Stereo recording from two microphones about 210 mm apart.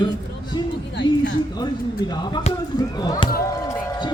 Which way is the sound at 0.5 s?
20° left (ahead or behind).